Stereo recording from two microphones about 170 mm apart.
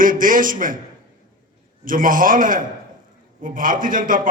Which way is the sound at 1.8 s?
55° right (ahead or behind).